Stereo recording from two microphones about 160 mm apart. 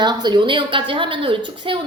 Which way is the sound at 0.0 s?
25° right (ahead or behind).